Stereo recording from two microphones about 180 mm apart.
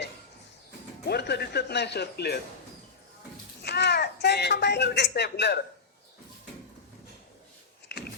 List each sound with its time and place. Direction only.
1.0 s speech: 65° left (ahead or behind)
3.6 s speech: 70° left (ahead or behind)